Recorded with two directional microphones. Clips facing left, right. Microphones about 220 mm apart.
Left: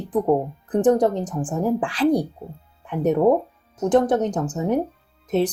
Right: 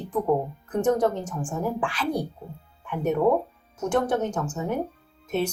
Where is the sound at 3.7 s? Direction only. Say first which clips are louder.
Left 6 dB; 35° left (ahead or behind).